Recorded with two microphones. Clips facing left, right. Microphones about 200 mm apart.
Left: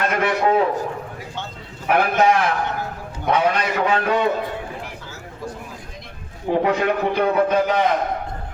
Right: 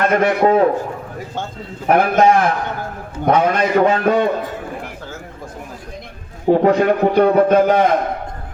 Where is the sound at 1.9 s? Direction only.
45° right (ahead or behind).